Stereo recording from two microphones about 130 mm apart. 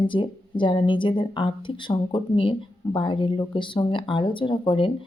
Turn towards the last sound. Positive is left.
turn(degrees=40)  # may be behind; listen again after turning